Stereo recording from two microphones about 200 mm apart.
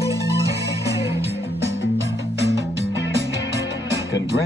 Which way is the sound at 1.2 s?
60° right (ahead or behind).